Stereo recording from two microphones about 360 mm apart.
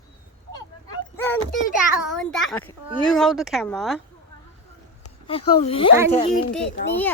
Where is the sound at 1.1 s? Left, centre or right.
Centre.